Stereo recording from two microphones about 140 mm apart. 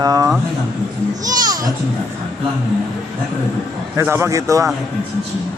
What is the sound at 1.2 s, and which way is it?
Children playing, 25° right (ahead or behind).